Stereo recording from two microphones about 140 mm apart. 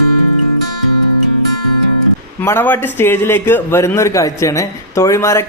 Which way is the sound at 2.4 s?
15° left (ahead or behind).